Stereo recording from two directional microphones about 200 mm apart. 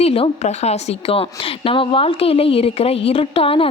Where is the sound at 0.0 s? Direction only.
30° left (ahead or behind).